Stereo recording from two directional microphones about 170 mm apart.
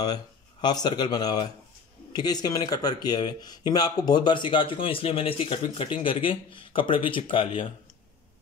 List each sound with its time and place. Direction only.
0.0 s speech: 25° left (ahead or behind)